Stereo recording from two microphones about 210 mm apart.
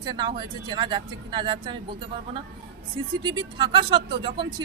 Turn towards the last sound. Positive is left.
turn(degrees=-25)  # may be behind; listen again after turning